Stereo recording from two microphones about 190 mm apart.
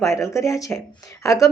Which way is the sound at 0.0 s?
15° left (ahead or behind).